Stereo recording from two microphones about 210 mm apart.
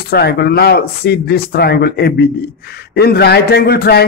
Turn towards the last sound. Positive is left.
turn(degrees=50)  # may be behind; listen again after turning